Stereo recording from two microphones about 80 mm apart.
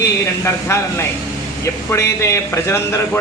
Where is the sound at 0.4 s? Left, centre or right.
Left.